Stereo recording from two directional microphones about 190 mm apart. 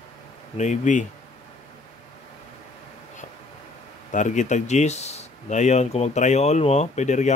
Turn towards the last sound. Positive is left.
turn(degrees=40)  # may be behind; listen again after turning